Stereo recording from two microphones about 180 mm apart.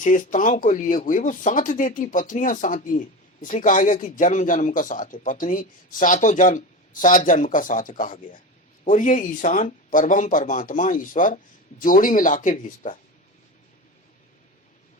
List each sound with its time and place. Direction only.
0.0 s speech: 45° left (ahead or behind)